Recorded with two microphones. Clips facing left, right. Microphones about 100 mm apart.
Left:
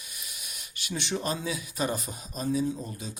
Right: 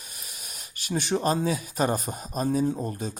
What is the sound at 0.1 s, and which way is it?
Speech, 40° right (ahead or behind).